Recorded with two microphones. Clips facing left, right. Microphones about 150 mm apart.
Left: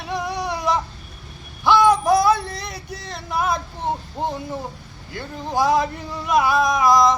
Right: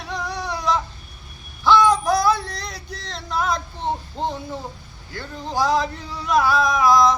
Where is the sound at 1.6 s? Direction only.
20° left (ahead or behind).